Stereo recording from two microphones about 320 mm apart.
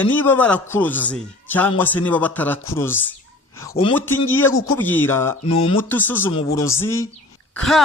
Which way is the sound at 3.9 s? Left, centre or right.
Centre.